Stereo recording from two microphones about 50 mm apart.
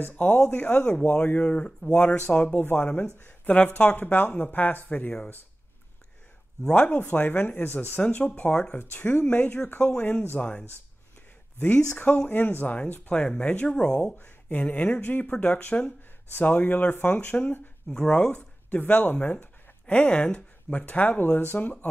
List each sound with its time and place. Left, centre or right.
0.0 s speech: left
6.7 s speech: left
8.0 s speech: left
8.5 s speech: centre
8.7 s speech: left
11.7 s speech: left
12.3 s speech: left; by 13.9 s centre
14.1 s speech: left
17.8 s speech: left
18.3 s speech: left
19.9 s speech: left